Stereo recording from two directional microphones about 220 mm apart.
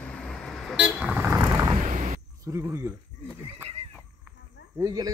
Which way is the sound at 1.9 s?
35° right (ahead or behind).